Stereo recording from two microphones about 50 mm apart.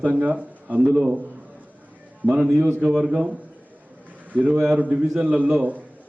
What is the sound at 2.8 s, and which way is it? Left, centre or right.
Speech, centre.